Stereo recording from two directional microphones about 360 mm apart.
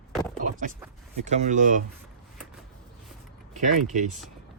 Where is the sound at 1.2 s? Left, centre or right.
Centre.